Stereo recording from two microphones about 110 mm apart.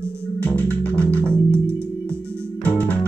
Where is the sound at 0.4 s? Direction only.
15° left (ahead or behind).